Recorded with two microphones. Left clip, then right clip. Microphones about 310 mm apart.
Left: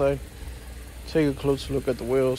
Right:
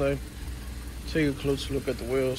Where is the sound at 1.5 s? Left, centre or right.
Centre.